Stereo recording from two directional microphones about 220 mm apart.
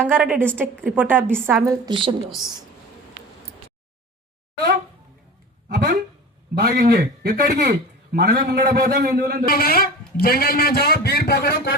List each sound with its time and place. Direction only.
0.0 s a woman's voice: 10° right (ahead or behind)
1.9 s speech: 20° right (ahead or behind)
5.6 s a sound: 40° right (ahead or behind)
6.6 s a man's voice: 40° right (ahead or behind)
9.5 s a man's voice: 45° left (ahead or behind)